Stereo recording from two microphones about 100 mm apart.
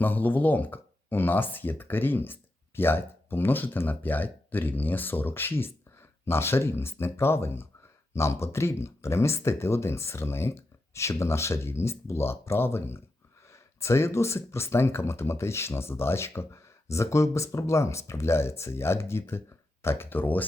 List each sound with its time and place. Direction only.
0.0 s speech: 20° left (ahead or behind)